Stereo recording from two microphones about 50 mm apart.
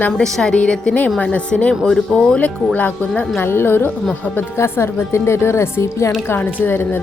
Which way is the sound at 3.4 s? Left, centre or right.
Left.